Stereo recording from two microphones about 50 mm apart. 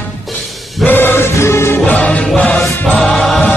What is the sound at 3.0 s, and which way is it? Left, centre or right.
Music, centre.